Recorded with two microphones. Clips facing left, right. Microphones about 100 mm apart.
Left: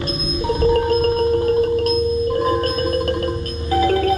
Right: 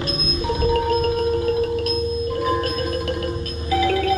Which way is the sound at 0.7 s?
40° left (ahead or behind).